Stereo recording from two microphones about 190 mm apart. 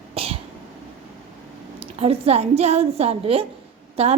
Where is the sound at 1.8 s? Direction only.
30° right (ahead or behind).